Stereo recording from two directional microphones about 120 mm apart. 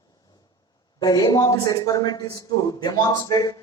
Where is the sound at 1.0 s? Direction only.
35° left (ahead or behind).